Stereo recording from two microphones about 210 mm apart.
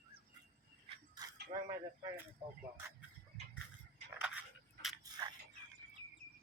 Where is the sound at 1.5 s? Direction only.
15° right (ahead or behind).